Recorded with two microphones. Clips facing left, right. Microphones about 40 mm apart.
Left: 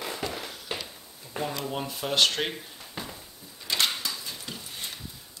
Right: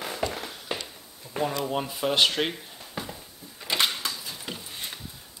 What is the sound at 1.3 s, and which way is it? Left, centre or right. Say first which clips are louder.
Speech: right 4 dB; centre.